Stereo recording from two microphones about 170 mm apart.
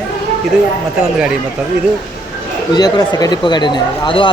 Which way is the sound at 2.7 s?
25° left (ahead or behind).